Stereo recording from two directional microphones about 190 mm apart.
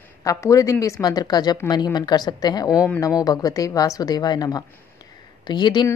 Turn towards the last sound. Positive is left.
turn(degrees=25)  # may be behind; listen again after turning